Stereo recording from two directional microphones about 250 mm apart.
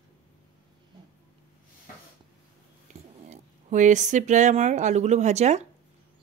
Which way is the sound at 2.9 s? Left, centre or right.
Right.